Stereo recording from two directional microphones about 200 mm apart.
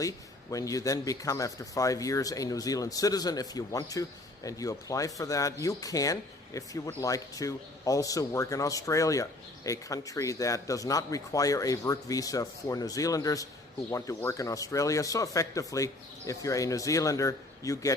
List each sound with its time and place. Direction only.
0.5 s speech: 15° left (ahead or behind)